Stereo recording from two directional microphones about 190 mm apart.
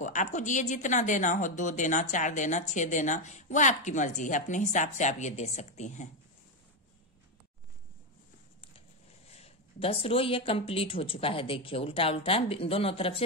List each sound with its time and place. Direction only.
0.0 s a woman's voice: 40° left (ahead or behind)
9.3 s speech: 30° left (ahead or behind)